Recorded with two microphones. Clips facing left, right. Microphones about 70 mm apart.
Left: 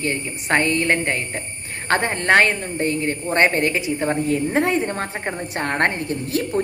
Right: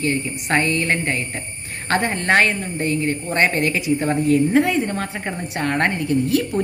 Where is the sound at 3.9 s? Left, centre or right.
Left.